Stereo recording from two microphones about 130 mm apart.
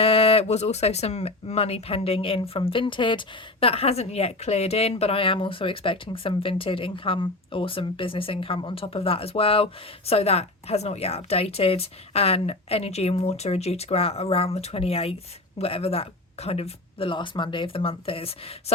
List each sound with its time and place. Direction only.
0.0 s speech: 50° left (ahead or behind)